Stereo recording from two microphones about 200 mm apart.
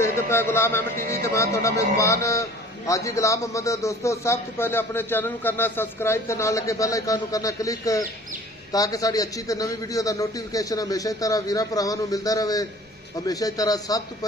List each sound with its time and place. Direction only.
0.0 s a man's voice: 10° left (ahead or behind)